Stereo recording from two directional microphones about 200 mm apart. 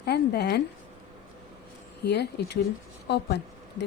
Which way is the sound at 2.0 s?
55° left (ahead or behind).